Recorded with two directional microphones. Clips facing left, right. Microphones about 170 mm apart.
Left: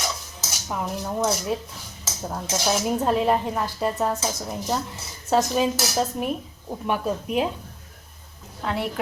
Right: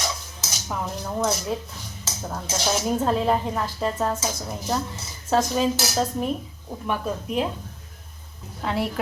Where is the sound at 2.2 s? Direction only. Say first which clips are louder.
Left 2 dB; 5° left (ahead or behind).